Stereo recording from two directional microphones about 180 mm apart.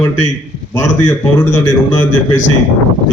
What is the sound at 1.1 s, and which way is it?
Speech, 10° left (ahead or behind).